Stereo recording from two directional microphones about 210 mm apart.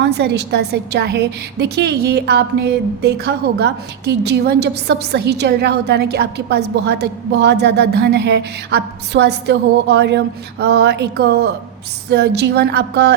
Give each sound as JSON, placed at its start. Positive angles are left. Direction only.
{"t": 0.0, "sound": "a woman's voice", "side_deg": -50}